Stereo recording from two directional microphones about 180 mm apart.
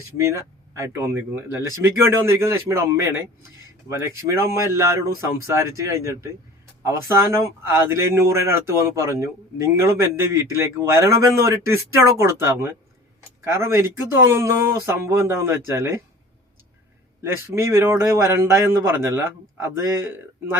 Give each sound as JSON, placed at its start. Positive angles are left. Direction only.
{"t": 0.2, "sound": "speech", "side_deg": -15}
{"t": 17.2, "sound": "speech", "side_deg": -15}